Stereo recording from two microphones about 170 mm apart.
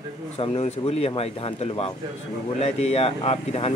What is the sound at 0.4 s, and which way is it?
A man's voice, 35° left (ahead or behind).